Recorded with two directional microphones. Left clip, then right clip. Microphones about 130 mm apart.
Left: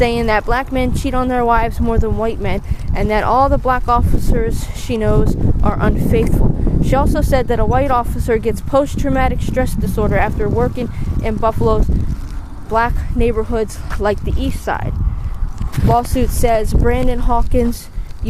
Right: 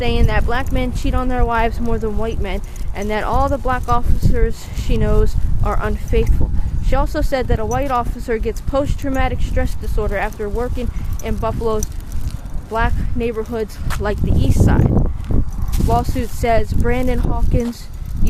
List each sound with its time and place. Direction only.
0.0 s speech: 45° left (ahead or behind); by 14.8 s 25° left (ahead or behind)
15.9 s speech: 45° left (ahead or behind)
16.5 s speech: 30° left (ahead or behind)